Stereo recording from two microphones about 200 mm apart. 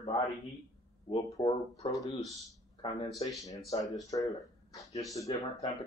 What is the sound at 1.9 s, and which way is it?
Speech, 15° left (ahead or behind).